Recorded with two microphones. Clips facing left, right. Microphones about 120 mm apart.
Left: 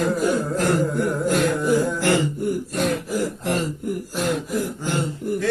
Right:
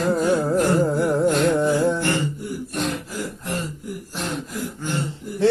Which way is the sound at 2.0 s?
90° left.